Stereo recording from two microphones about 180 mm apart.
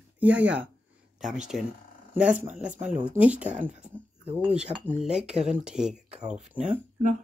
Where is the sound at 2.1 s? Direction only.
5° right (ahead or behind).